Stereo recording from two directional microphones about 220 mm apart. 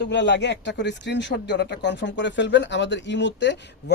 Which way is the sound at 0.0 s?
50° left (ahead or behind).